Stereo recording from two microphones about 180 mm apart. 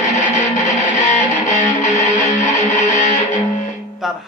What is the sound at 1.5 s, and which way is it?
Music, 45° left (ahead or behind).